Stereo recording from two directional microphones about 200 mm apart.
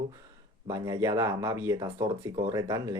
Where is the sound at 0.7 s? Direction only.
15° right (ahead or behind).